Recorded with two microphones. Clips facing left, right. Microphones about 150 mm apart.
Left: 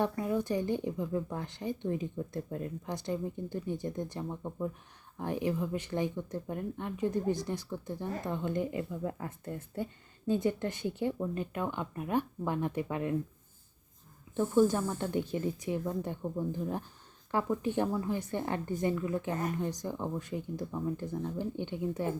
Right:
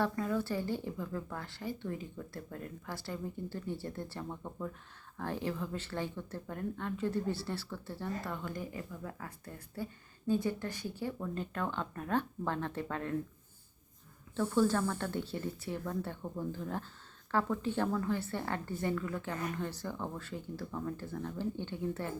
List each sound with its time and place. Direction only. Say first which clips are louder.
0.0 s speech: left 2 dB; 20° left (ahead or behind)
14.3 s speech: left 3 dB; 15° left (ahead or behind)